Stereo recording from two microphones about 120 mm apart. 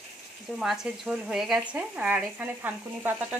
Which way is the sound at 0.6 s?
5° right (ahead or behind).